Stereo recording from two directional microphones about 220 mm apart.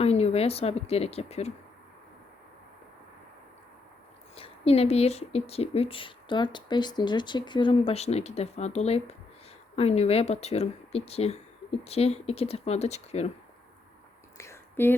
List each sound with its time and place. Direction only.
0.0 s speech: 30° left (ahead or behind)
4.4 s speech: 25° left (ahead or behind)
14.3 s whispering: 10° left (ahead or behind)